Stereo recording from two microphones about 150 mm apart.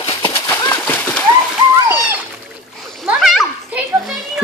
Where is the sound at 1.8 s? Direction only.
15° right (ahead or behind).